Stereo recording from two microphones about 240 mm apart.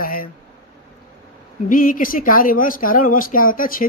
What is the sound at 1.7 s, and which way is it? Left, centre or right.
Speech, left.